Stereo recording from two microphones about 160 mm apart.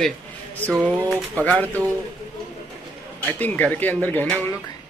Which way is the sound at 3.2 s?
10° left (ahead or behind).